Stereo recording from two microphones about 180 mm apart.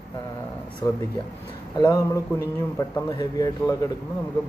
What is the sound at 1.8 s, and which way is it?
A man's voice, 20° left (ahead or behind).